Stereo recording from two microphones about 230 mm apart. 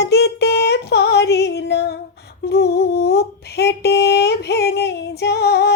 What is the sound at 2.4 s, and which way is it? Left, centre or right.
Humming, left.